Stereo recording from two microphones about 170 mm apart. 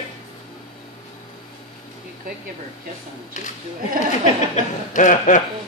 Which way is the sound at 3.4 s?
45° left (ahead or behind).